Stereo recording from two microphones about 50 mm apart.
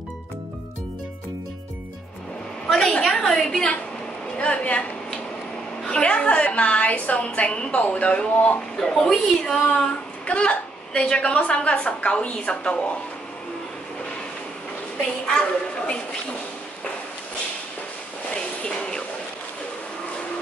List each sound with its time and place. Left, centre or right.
2.7 s a woman's voice: centre
4.4 s a woman's voice: left
5.9 s a woman's voice: left
8.7 s a woman's voice: centre
10.2 s a woman's voice: left
18.3 s a sound: centre